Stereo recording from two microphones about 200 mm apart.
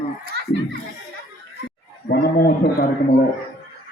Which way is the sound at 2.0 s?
50° left (ahead or behind).